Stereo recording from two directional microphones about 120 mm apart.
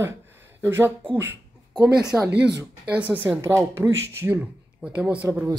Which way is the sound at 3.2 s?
20° right (ahead or behind).